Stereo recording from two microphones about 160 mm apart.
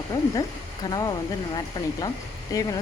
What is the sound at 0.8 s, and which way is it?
Speech, 25° left (ahead or behind).